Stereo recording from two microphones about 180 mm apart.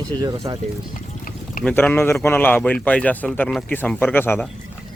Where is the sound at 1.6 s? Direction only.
10° left (ahead or behind).